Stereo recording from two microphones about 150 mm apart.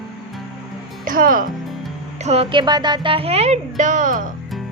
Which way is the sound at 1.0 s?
70° right (ahead or behind).